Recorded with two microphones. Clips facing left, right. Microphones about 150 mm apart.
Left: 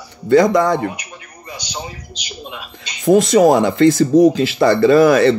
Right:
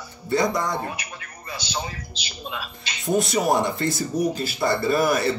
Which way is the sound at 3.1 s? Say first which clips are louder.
Left 10 dB; 90° left.